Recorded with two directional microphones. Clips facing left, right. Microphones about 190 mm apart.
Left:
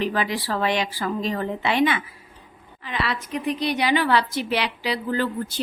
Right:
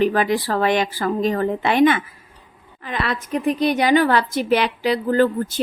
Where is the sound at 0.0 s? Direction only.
50° right (ahead or behind).